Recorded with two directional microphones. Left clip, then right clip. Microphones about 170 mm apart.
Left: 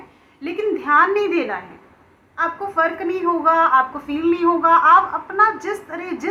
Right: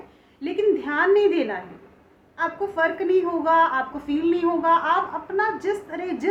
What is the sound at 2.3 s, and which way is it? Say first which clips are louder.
A woman's voice: left 5 dB; 35° right (ahead or behind).